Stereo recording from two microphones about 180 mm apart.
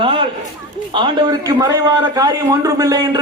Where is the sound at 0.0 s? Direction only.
30° right (ahead or behind).